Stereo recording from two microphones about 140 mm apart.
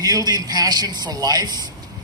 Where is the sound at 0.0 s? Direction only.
25° right (ahead or behind).